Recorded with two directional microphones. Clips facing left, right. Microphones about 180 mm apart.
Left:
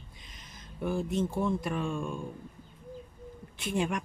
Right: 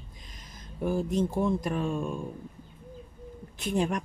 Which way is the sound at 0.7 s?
40° right (ahead or behind).